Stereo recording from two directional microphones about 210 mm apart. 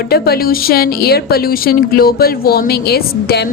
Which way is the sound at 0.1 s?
45° left (ahead or behind).